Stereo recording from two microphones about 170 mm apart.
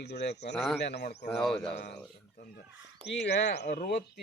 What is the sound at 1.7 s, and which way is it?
Speech, 85° left.